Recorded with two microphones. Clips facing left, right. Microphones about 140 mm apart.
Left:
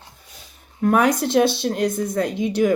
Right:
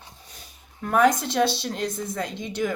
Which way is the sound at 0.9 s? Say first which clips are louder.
Left 2 dB; 65° left (ahead or behind).